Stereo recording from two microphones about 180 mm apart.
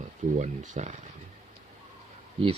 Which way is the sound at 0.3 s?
45° right (ahead or behind).